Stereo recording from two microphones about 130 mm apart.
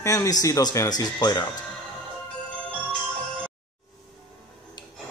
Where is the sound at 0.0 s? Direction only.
25° left (ahead or behind).